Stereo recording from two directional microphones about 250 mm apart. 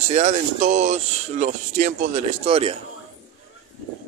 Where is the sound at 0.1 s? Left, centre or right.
Right.